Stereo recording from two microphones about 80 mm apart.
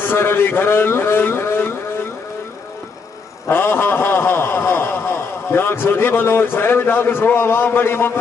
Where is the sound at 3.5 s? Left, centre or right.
Left.